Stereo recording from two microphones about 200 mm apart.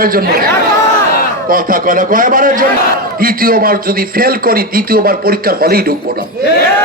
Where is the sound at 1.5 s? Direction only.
45° right (ahead or behind).